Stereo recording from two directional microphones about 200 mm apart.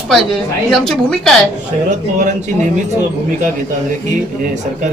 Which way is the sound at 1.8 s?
40° right (ahead or behind).